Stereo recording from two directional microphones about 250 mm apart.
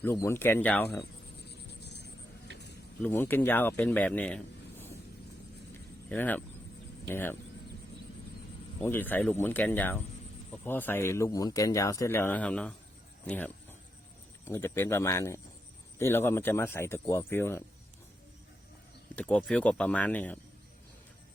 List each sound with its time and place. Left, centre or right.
0.0 s speech: centre
1.4 s music: left
3.0 s speech: centre
6.1 s speech: centre
8.8 s speech: centre
19.1 s speech: centre